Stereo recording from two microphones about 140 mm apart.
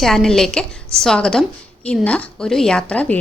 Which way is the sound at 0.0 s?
Centre (ahead or behind).